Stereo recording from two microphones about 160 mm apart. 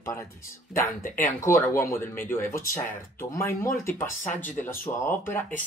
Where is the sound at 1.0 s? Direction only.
55° left (ahead or behind).